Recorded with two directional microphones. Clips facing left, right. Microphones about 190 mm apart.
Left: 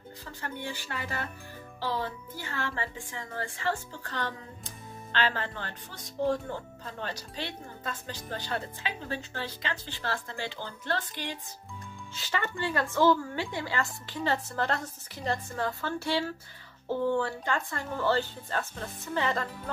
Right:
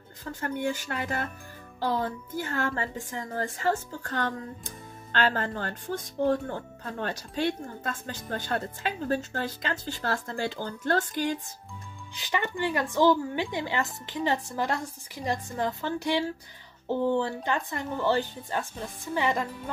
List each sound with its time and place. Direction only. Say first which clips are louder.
0.2 s speech: right 8 dB; 45° right (ahead or behind)
12.2 s speech: right 3 dB; 15° right (ahead or behind)